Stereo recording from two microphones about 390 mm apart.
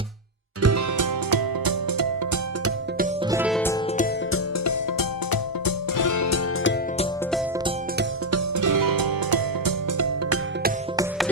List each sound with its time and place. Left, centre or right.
0.6 s music: right
3.2 s music: centre
4.3 s music: left
8.3 s music: right